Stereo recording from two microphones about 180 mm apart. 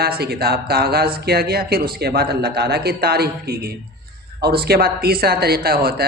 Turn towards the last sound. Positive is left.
turn(degrees=-60)  # may be behind; listen again after turning